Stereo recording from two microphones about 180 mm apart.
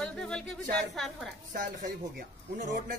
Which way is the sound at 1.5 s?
50° right (ahead or behind).